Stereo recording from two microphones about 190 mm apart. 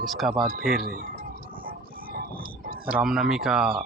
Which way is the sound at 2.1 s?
50° right (ahead or behind).